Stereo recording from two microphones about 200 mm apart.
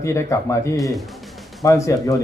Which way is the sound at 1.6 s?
15° left (ahead or behind).